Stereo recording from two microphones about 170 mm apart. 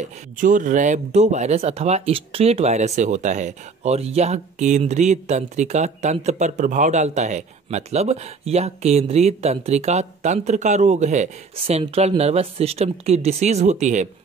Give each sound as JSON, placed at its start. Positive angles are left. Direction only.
{"t": 0.0, "sound": "speech", "side_deg": -50}